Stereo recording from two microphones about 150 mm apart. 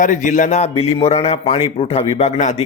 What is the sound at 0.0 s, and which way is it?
Speech, 60° left (ahead or behind).